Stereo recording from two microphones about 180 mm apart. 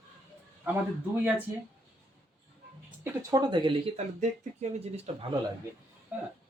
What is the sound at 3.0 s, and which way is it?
Speech, 20° right (ahead or behind).